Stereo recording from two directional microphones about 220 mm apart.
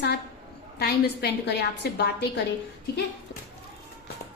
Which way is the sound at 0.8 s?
45° left (ahead or behind).